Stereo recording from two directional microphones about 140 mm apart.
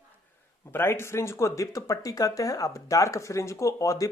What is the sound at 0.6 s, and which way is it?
Speech, 20° left (ahead or behind).